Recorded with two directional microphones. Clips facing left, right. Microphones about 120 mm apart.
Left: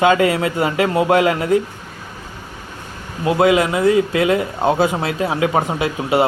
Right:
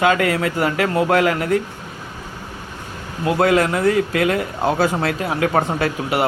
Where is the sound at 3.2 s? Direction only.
20° left (ahead or behind).